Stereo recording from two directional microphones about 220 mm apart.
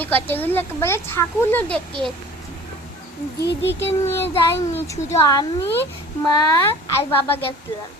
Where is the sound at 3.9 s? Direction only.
10° left (ahead or behind).